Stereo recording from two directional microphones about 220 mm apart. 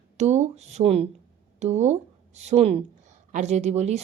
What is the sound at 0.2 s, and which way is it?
Speech, 30° right (ahead or behind).